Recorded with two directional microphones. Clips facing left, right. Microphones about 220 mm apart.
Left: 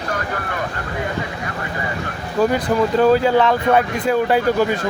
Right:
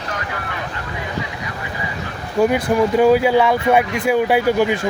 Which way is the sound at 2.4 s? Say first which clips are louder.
Right 1 dB; 10° right (ahead or behind).